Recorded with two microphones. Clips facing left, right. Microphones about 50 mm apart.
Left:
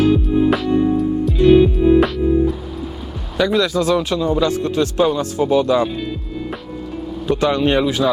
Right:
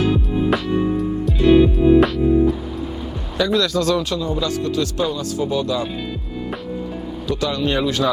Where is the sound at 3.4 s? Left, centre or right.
Centre.